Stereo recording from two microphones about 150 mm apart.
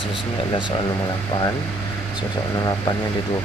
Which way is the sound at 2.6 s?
25° left (ahead or behind).